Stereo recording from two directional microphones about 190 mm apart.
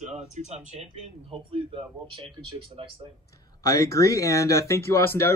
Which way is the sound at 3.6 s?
15° left (ahead or behind).